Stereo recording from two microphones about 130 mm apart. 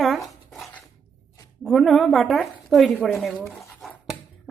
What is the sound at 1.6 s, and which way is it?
Speech, centre (ahead or behind).